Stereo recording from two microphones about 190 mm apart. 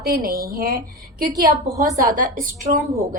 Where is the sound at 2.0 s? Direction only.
45° right (ahead or behind).